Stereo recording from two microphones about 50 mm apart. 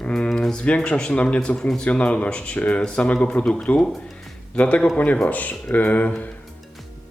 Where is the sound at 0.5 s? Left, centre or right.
Left.